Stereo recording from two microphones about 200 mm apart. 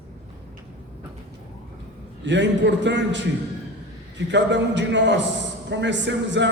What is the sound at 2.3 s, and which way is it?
A man's voice, 65° right (ahead or behind).